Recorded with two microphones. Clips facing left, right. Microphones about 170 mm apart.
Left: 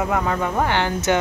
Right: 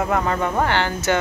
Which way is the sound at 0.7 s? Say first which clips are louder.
Left 1 dB; 15° left (ahead or behind).